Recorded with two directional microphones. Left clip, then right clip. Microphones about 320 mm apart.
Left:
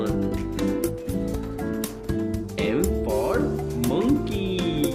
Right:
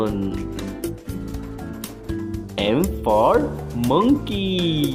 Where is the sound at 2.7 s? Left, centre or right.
Centre.